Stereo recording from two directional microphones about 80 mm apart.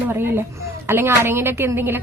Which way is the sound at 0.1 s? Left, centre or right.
Right.